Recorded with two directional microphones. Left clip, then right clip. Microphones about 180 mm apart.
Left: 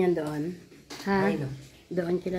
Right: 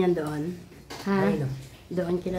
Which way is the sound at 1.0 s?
15° left (ahead or behind).